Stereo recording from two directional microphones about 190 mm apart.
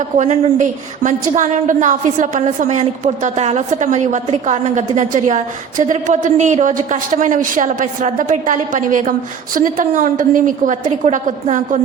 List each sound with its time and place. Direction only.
0.2 s a woman's voice: 40° right (ahead or behind)